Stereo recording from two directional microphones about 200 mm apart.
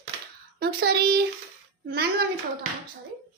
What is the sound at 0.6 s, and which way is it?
Child singing, 50° right (ahead or behind).